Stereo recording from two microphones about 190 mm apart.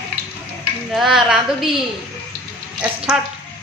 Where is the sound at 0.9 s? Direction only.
Centre (ahead or behind).